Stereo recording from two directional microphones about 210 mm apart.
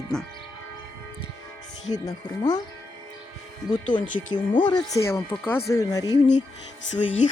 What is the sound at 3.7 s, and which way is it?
Speech, 20° left (ahead or behind).